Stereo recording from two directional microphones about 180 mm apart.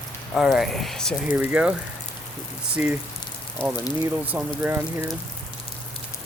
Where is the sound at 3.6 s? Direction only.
30° left (ahead or behind).